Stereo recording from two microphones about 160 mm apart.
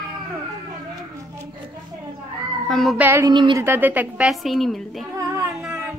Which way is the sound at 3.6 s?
10° right (ahead or behind).